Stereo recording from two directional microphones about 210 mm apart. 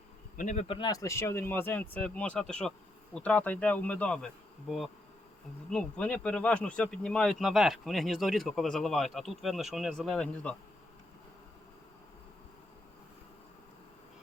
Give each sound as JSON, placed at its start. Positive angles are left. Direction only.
{"t": 0.3, "sound": "speech", "side_deg": 35}
{"t": 0.7, "sound": "speech", "side_deg": 20}
{"t": 5.7, "sound": "speech", "side_deg": 5}